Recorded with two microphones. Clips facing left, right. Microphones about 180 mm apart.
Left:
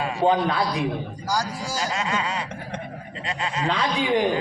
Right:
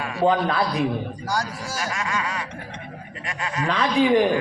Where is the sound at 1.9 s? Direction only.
25° left (ahead or behind).